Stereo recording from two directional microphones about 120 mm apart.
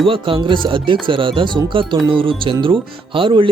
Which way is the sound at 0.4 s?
45° right (ahead or behind).